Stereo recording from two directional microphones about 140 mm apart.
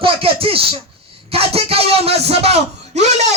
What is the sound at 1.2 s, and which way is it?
Speech, 45° right (ahead or behind).